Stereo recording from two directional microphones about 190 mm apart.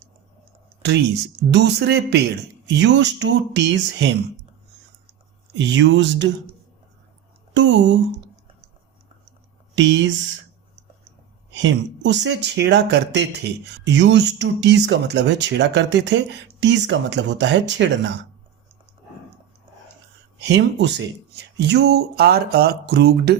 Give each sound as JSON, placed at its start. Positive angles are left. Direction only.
{"t": 0.8, "sound": "speech", "side_deg": -60}
{"t": 5.5, "sound": "speech", "side_deg": -70}
{"t": 7.5, "sound": "speech", "side_deg": -70}
{"t": 9.7, "sound": "speech", "side_deg": -75}
{"t": 11.5, "sound": "speech", "side_deg": -70}
{"t": 20.4, "sound": "speech", "side_deg": -65}